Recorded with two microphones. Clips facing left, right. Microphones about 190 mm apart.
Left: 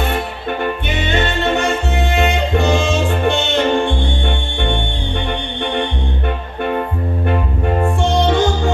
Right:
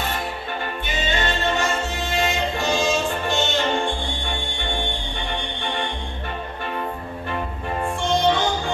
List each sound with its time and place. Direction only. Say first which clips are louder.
0.0 s music: left 7 dB; 55° left (ahead or behind)
7.2 s music: left 8 dB; 60° left (ahead or behind)